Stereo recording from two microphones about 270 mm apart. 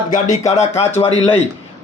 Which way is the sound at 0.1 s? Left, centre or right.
Left.